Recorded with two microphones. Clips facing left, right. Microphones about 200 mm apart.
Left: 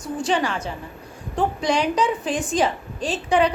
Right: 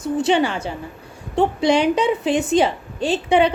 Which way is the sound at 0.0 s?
25° right (ahead or behind).